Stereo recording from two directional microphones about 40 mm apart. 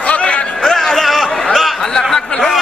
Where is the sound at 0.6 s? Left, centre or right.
Centre.